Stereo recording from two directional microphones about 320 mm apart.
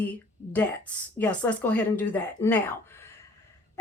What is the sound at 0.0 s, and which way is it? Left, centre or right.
A woman's voice, centre.